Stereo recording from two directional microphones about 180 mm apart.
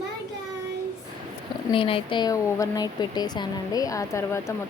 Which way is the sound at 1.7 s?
30° left (ahead or behind).